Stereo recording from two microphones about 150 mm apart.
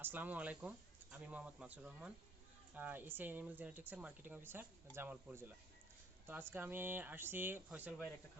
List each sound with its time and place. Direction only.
0.0 s speech: 10° right (ahead or behind)